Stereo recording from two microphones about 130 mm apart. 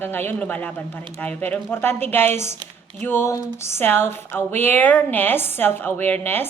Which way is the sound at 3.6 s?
20° left (ahead or behind).